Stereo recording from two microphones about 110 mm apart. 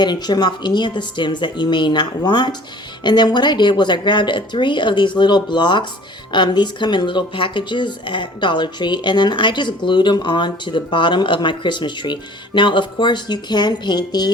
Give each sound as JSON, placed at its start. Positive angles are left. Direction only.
{"t": 0.0, "sound": "speech", "side_deg": 40}